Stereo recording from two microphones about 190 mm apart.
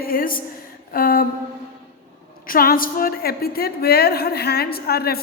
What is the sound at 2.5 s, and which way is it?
A woman's voice, 50° left (ahead or behind).